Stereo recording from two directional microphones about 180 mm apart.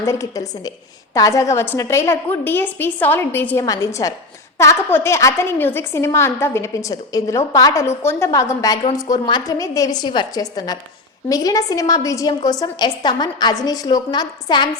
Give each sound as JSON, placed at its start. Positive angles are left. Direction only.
{"t": 0.0, "sound": "a woman's voice", "side_deg": 15}